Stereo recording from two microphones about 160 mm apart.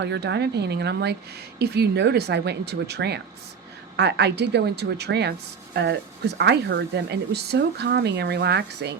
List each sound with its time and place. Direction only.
0.0 s speech: 90° right